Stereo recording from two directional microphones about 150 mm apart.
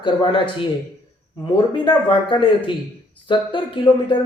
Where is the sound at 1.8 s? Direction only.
30° left (ahead or behind).